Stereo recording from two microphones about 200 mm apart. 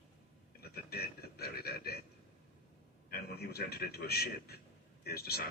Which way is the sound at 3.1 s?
50° left (ahead or behind).